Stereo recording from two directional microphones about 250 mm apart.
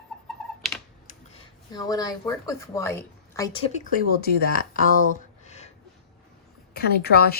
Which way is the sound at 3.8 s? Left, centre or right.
Left.